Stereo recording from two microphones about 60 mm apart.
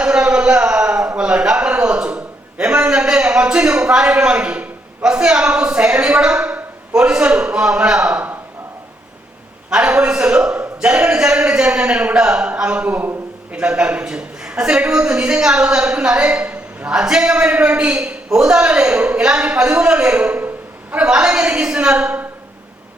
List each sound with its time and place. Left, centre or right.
0.0 s a sound: centre
5.1 s a man's voice: centre
9.6 s a man's voice: centre